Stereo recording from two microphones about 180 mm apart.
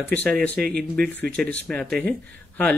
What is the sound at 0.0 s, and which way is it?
Speech, 10° left (ahead or behind).